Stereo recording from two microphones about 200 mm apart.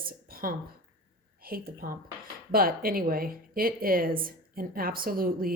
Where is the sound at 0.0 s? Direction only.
45° right (ahead or behind).